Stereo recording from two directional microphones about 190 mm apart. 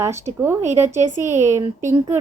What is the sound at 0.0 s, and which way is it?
A woman's voice, 15° right (ahead or behind).